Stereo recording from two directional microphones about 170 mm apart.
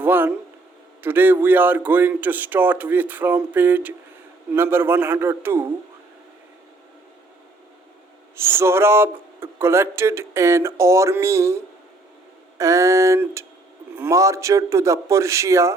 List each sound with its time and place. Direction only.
0.0 s speech: 10° right (ahead or behind)
8.4 s speech: 15° right (ahead or behind)